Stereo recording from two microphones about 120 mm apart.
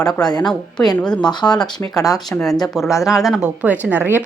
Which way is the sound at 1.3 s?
35° left (ahead or behind).